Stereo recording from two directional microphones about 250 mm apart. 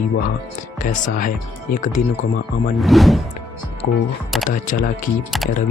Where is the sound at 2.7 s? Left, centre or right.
Centre.